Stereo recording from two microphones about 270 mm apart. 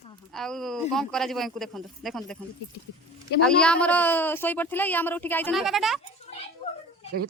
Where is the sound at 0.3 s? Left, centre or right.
Centre.